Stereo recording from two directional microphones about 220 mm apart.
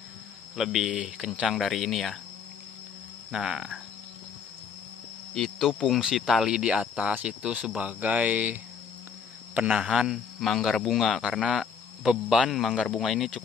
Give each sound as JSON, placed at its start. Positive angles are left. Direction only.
{"t": 0.6, "sound": "speech", "side_deg": 0}
{"t": 3.3, "sound": "speech", "side_deg": -5}
{"t": 5.3, "sound": "speech", "side_deg": 0}